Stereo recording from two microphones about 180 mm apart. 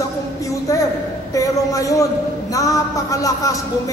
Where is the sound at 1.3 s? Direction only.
20° left (ahead or behind).